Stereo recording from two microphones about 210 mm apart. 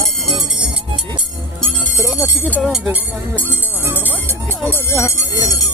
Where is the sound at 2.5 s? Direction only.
5° right (ahead or behind).